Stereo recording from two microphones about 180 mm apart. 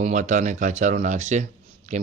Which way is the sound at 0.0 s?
40° right (ahead or behind).